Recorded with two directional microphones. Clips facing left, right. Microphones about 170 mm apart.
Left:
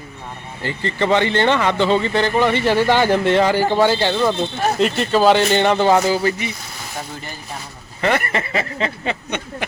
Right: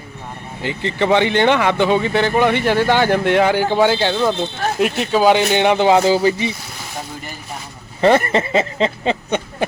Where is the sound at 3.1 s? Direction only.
10° right (ahead or behind).